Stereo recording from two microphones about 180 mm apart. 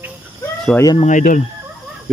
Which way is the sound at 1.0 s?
45° left (ahead or behind).